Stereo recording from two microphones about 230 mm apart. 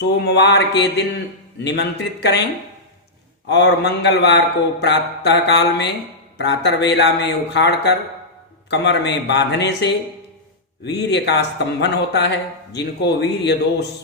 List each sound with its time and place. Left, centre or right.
0.0 s speech: left
3.5 s speech: left